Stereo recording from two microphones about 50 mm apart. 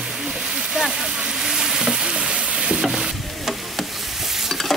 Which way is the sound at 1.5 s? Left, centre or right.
Centre.